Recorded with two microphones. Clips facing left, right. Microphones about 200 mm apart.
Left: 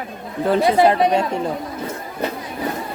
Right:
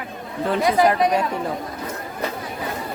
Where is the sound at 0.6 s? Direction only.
30° left (ahead or behind).